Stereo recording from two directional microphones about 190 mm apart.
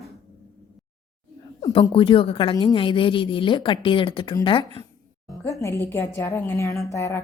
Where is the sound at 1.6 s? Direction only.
25° left (ahead or behind).